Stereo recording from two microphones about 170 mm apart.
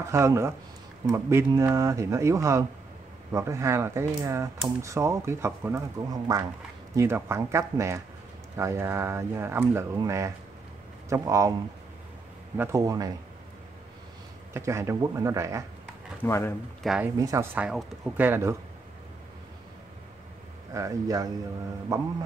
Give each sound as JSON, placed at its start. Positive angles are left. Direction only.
{"t": 0.1, "sound": "a man's voice", "side_deg": -15}
{"t": 12.5, "sound": "a man's voice", "side_deg": -20}
{"t": 14.5, "sound": "speech", "side_deg": -15}
{"t": 16.2, "sound": "speech", "side_deg": 15}
{"t": 16.8, "sound": "speech", "side_deg": -5}
{"t": 17.2, "sound": "a man's voice", "side_deg": -20}
{"t": 17.6, "sound": "speech", "side_deg": -5}
{"t": 20.7, "sound": "a man's voice", "side_deg": -20}